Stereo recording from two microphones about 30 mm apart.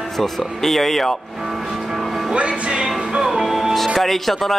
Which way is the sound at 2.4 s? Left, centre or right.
Right.